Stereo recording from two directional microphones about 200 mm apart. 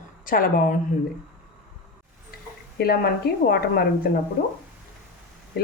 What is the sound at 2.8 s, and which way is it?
Speech, 50° left (ahead or behind).